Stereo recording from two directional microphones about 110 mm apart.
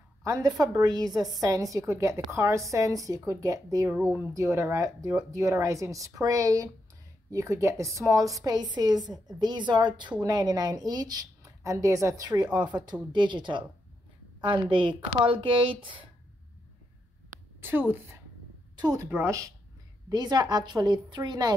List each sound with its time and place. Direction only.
0.2 s a woman's voice: 30° right (ahead or behind); by 16.1 s 50° right (ahead or behind)
17.6 s a woman's voice: 20° right (ahead or behind)
20.1 s a woman's voice: 35° right (ahead or behind)